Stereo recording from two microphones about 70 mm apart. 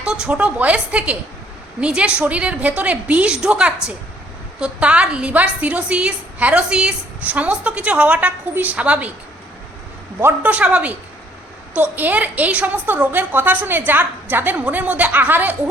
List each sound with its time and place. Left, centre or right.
0.0 s a woman's voice: centre
10.4 s a woman's voice: centre